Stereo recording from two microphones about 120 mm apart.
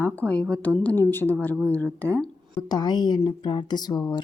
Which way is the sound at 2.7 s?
35° left (ahead or behind).